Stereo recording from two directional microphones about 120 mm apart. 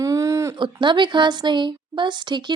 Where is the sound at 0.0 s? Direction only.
25° right (ahead or behind).